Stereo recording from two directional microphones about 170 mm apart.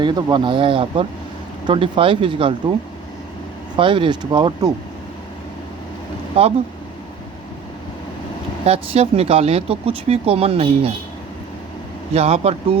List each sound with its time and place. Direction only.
0.0 s speech: 25° right (ahead or behind)
3.8 s speech: 30° right (ahead or behind)
8.6 s speech: 35° right (ahead or behind)
12.1 s speech: 35° right (ahead or behind)